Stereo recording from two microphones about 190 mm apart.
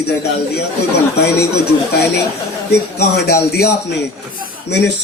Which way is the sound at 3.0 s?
55° left (ahead or behind).